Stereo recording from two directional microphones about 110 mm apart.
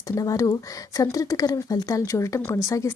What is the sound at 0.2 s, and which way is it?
A woman's voice, 30° left (ahead or behind).